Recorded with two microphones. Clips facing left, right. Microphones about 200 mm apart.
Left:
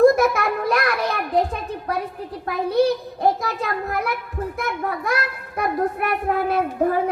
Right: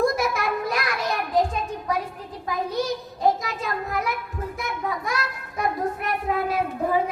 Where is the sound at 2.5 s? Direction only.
60° left (ahead or behind).